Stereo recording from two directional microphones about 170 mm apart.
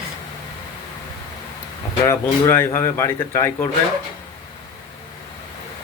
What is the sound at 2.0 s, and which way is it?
Speech, 15° left (ahead or behind).